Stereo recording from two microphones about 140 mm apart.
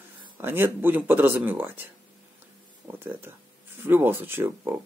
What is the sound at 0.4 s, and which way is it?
Speech, 15° right (ahead or behind).